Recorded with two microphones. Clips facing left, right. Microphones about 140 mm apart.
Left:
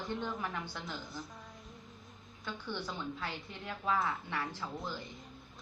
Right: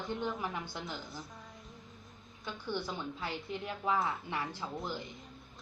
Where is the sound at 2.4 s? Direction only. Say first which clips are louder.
Right 2 dB; 15° right (ahead or behind).